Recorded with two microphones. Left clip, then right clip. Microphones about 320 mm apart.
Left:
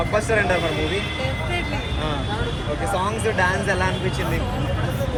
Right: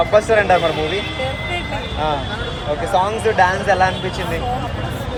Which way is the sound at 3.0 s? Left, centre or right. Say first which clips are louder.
Right 4 dB; right.